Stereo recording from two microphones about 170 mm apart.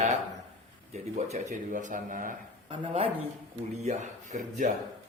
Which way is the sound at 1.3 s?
45° right (ahead or behind).